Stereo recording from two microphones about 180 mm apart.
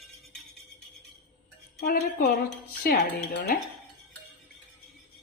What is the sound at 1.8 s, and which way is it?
A woman's voice, 55° left (ahead or behind).